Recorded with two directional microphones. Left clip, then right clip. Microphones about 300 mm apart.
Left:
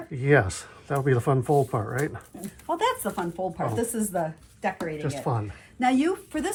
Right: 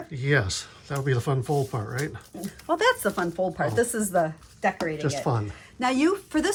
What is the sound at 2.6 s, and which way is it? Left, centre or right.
Speech, right.